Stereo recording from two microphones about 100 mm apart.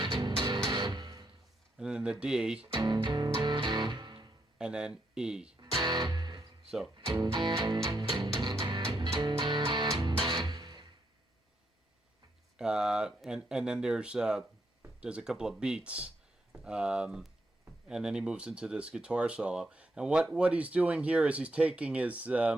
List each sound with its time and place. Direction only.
0.4 s music: 50° right (ahead or behind)
1.8 s speech: 10° right (ahead or behind)
2.7 s music: 45° right (ahead or behind)
4.5 s speech: 10° right (ahead or behind)
5.7 s music: 50° right (ahead or behind)
6.7 s speech: 5° right (ahead or behind)
7.0 s music: 45° right (ahead or behind)
12.5 s speech: 5° right (ahead or behind)